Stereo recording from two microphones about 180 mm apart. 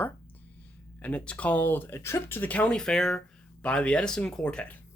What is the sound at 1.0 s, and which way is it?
Speech, 5° left (ahead or behind).